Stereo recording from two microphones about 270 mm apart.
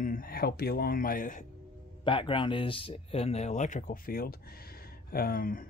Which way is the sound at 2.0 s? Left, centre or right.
Centre.